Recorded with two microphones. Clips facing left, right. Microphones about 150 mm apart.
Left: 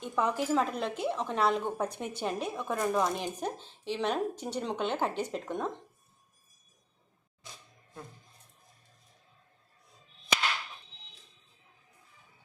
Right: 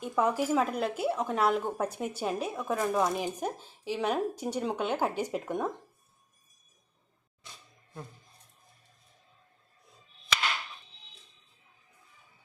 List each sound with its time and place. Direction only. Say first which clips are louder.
0.0 s speech: right 2 dB; 10° right (ahead or behind)